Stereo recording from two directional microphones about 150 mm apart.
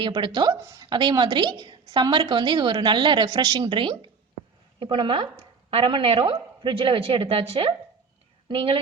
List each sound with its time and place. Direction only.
0.0 s a woman's voice: 30° right (ahead or behind)
0.9 s a woman's voice: 30° right (ahead or behind)